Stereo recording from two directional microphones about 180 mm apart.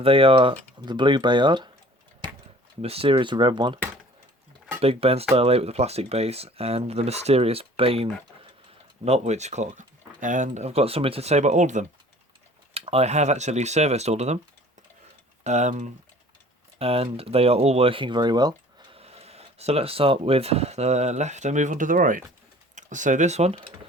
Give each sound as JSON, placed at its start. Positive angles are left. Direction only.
{"t": 0.0, "sound": "speech", "side_deg": -30}
{"t": 2.8, "sound": "speech", "side_deg": -30}
{"t": 4.8, "sound": "speech", "side_deg": -35}
{"t": 15.4, "sound": "speech", "side_deg": -40}